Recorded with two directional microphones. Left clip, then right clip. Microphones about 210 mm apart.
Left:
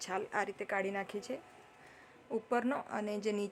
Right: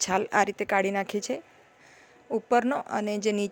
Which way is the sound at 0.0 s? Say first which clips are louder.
Right 12 dB; 40° right (ahead or behind).